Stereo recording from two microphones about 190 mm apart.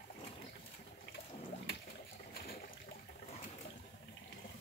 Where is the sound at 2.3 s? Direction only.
50° left (ahead or behind).